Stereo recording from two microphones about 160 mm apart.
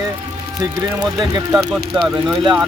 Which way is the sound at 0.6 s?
25° right (ahead or behind).